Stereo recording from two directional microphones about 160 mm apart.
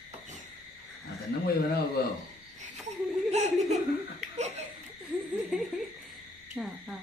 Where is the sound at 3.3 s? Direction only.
45° right (ahead or behind).